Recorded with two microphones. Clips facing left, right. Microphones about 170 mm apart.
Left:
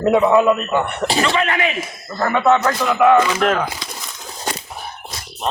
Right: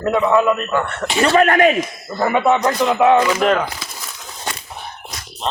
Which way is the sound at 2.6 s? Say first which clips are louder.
Even; 20° right (ahead or behind).